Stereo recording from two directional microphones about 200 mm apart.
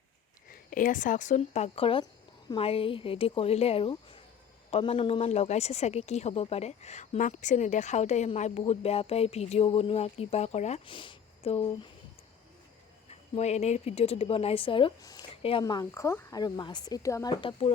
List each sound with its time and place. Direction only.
0.5 s a woman's voice: 45° left (ahead or behind)
13.1 s speech: 35° left (ahead or behind)
15.6 s speech: 15° left (ahead or behind)
17.6 s speech: 30° left (ahead or behind)